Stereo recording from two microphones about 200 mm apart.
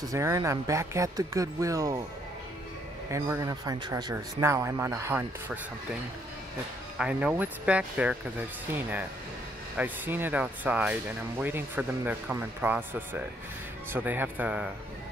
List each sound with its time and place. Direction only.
0.0 s speech: 15° right (ahead or behind)
3.1 s speech: 15° right (ahead or behind)
7.0 s speech: 5° right (ahead or behind)